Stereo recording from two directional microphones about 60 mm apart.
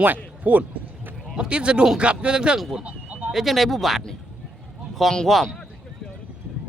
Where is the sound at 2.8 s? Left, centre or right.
Right.